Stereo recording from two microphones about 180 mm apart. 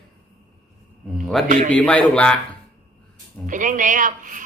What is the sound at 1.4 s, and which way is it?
Speech, 45° right (ahead or behind).